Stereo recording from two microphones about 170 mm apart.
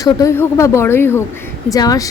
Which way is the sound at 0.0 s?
20° left (ahead or behind).